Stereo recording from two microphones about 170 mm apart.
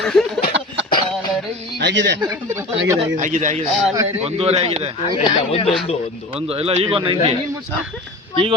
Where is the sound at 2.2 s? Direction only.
15° right (ahead or behind).